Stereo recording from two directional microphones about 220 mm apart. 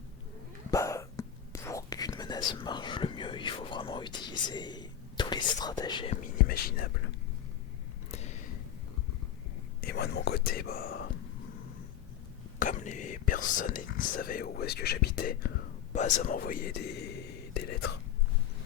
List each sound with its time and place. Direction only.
0.7 s whispering: 15° left (ahead or behind)
6.2 s speech: 45° left (ahead or behind)
8.1 s a sound: 30° left (ahead or behind)
9.8 s whispering: 50° left (ahead or behind)
12.5 s whispering: 35° left (ahead or behind)